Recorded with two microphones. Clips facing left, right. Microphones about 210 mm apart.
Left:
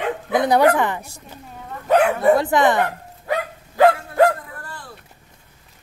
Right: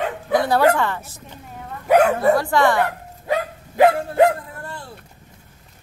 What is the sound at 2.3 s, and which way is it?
Speech, 20° left (ahead or behind).